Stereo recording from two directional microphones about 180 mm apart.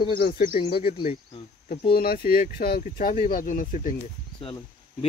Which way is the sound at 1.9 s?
55° left (ahead or behind).